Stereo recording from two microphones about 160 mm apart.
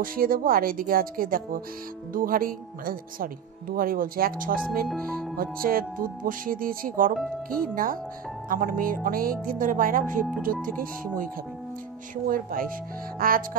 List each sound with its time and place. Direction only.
0.0 s speech: 65° right (ahead or behind)
12.3 s speech: 60° right (ahead or behind)